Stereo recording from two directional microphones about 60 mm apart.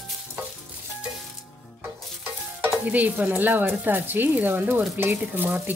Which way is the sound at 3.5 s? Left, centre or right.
Right.